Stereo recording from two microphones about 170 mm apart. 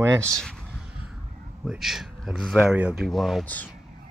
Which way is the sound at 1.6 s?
Centre (ahead or behind).